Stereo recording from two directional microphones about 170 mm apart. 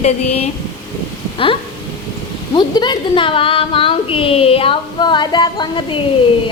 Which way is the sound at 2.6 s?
25° left (ahead or behind).